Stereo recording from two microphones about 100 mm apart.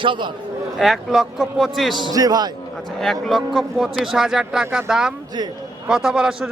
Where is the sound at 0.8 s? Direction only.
Centre (ahead or behind).